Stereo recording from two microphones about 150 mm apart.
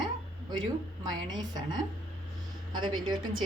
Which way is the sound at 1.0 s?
25° right (ahead or behind).